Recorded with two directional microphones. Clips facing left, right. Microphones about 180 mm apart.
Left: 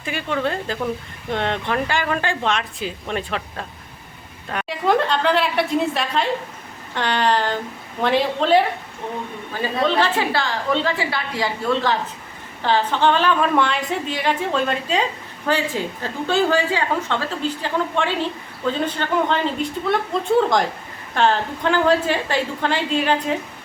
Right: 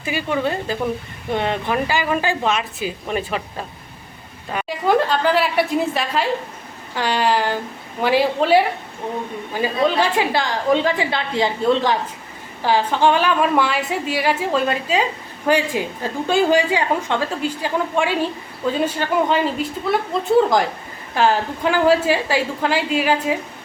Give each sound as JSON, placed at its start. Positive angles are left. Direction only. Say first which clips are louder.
{"t": 0.0, "sound": "a woman's voice", "louder": "right 2 dB", "side_deg": -5}
{"t": 21.2, "sound": "a woman's voice", "louder": "right 1 dB", "side_deg": -10}